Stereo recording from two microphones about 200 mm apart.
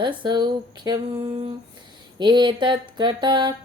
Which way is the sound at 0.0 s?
25° right (ahead or behind).